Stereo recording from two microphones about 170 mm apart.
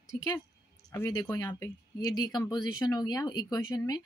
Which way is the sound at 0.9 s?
20° left (ahead or behind).